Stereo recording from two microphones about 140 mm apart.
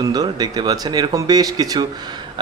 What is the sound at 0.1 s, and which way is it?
Speech, 30° right (ahead or behind).